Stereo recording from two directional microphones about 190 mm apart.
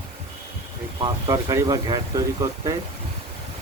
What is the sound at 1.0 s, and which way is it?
Speech, 20° right (ahead or behind).